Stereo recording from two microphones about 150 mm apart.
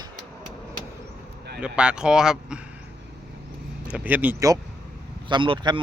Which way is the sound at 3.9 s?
10° right (ahead or behind).